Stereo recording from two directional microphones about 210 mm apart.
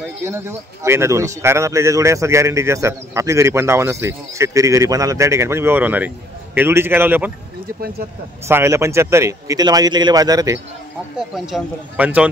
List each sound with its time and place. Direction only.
0.0 s a man's voice: 10° right (ahead or behind)
8.5 s a man's voice: 10° right (ahead or behind)
11.1 s speech: centre (ahead or behind)